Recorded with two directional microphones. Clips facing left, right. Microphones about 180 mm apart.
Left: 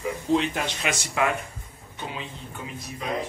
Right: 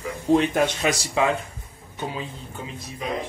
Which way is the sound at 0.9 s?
25° right (ahead or behind).